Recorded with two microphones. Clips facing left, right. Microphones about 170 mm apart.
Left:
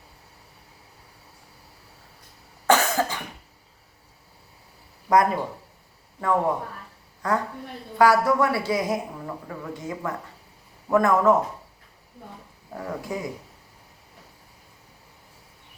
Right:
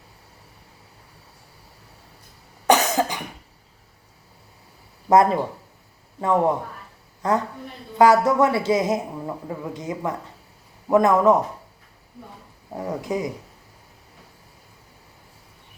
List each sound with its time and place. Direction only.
2.6 s cough: 20° right (ahead or behind)
5.0 s a woman's voice: 25° right (ahead or behind)
12.7 s speech: 20° right (ahead or behind)